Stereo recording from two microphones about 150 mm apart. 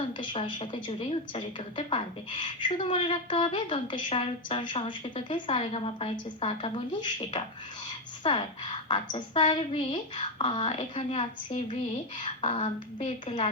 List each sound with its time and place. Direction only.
0.2 s a woman's voice: 35° left (ahead or behind)